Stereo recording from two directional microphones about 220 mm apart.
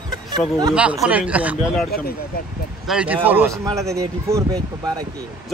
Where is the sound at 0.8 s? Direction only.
5° right (ahead or behind).